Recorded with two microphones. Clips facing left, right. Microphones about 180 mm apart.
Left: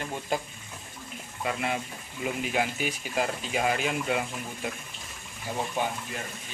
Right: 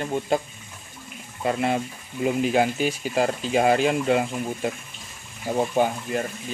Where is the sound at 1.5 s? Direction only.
35° right (ahead or behind).